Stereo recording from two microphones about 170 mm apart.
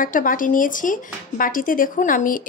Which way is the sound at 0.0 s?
55° left (ahead or behind).